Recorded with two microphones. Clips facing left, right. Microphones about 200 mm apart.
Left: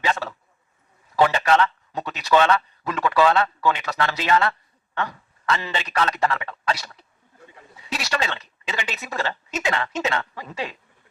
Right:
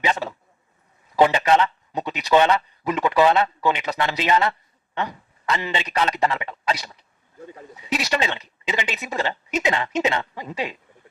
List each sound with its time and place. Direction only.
0.0 s a man's voice: 20° right (ahead or behind)